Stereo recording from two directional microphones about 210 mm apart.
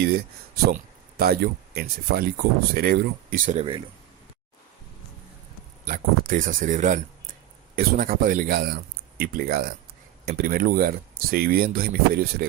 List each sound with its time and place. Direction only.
0.7 s speech: 45° right (ahead or behind)
5.8 s speech: 40° right (ahead or behind)